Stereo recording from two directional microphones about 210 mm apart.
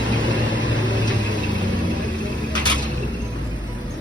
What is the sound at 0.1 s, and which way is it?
Vehicle, 20° left (ahead or behind).